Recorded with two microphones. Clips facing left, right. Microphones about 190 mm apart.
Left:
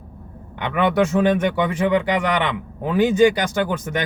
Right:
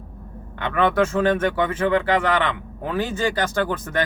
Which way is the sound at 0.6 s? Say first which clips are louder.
Left 1 dB; 15° left (ahead or behind).